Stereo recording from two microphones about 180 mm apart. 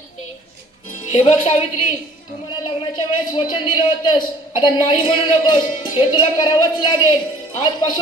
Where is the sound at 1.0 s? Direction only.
30° left (ahead or behind).